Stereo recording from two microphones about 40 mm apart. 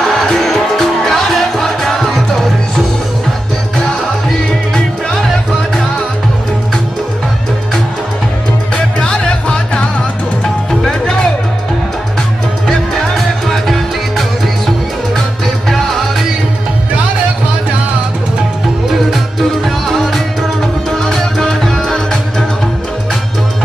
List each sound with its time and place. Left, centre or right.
0.3 s music: centre
4.5 s music: centre
8.7 s music: left
12.6 s music: centre
19.6 s music: centre